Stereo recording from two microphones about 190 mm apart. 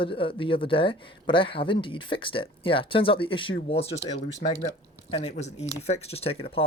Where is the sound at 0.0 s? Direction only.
25° left (ahead or behind).